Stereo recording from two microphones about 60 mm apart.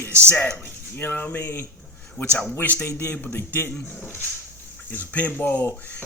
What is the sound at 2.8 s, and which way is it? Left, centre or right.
Speech, left.